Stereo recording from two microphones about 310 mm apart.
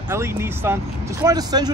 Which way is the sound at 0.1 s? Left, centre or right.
Centre.